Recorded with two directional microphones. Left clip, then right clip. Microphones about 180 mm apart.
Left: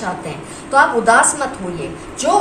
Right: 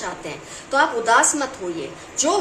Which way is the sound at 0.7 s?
55° right (ahead or behind).